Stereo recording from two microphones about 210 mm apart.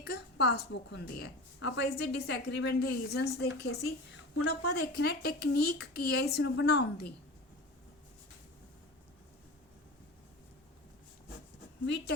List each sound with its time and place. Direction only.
0.0 s a woman's voice: 50° left (ahead or behind)